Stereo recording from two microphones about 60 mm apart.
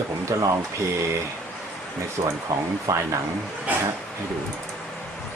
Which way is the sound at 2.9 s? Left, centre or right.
Right.